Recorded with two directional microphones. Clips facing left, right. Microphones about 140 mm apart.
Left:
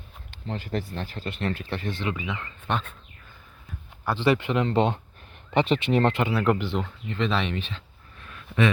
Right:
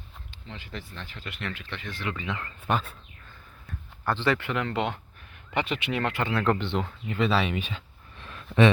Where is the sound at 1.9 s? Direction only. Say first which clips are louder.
Left 2 dB; 20° left (ahead or behind).